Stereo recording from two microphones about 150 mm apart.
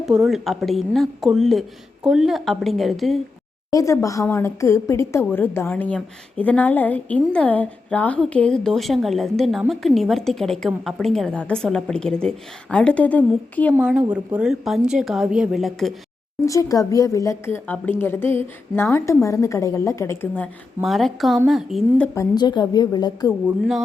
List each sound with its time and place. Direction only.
0.0 s a woman's voice: 5° right (ahead or behind)
3.7 s a woman's voice: 20° left (ahead or behind)
13.7 s a woman's voice: 10° right (ahead or behind)
16.5 s a woman's voice: 25° left (ahead or behind)
20.8 s a woman's voice: centre (ahead or behind)
22.1 s a woman's voice: 25° left (ahead or behind)
23.5 s a woman's voice: centre (ahead or behind)